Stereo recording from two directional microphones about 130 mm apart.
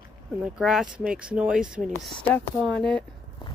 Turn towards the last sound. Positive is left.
turn(degrees=5)  # may be behind; listen again after turning